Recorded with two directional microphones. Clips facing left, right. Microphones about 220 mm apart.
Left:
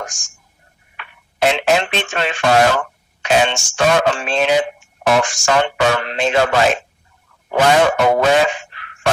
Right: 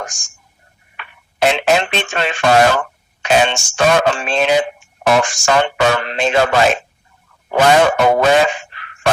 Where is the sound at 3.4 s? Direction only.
90° right.